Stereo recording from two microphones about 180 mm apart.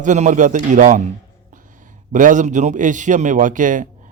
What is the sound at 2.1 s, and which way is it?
A man's voice, 45° right (ahead or behind).